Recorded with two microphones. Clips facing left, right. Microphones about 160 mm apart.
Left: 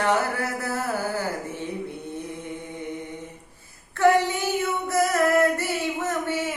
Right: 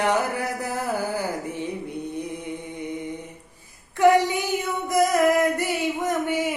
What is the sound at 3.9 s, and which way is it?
Female singing, 15° right (ahead or behind).